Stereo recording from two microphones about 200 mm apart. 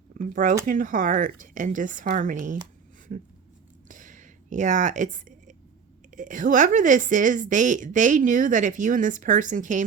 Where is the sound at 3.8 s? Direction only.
40° right (ahead or behind).